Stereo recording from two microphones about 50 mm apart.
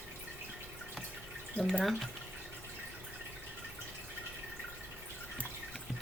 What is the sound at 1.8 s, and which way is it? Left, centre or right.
Speech, centre.